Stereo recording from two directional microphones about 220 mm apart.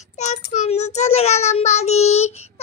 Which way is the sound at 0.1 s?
30° left (ahead or behind).